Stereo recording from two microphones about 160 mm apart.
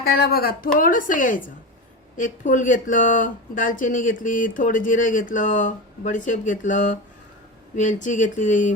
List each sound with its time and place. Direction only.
0.0 s a woman's voice: 75° left (ahead or behind); by 8.7 s 50° left (ahead or behind)